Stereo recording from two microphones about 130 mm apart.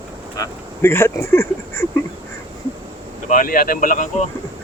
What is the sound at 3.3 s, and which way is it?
Speech, 90° left.